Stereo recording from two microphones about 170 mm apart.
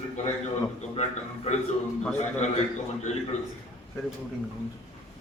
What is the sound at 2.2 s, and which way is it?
Speech, 40° left (ahead or behind).